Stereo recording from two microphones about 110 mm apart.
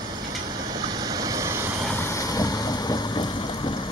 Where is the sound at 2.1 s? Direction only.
35° left (ahead or behind).